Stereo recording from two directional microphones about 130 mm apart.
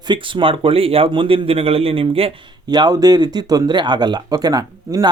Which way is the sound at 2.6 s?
35° right (ahead or behind).